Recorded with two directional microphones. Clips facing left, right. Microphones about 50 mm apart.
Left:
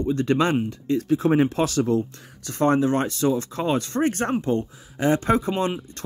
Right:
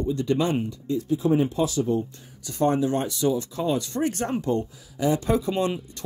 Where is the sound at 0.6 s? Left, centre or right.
Left.